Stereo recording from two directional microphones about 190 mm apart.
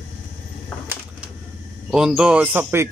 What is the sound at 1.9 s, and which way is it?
Speech, 5° right (ahead or behind).